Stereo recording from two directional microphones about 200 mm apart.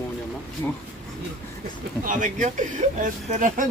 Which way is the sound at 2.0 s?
40° right (ahead or behind).